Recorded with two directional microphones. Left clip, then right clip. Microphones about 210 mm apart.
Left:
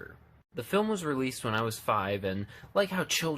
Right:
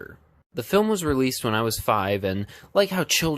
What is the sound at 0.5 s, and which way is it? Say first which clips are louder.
Speech: right 8 dB; 45° right (ahead or behind).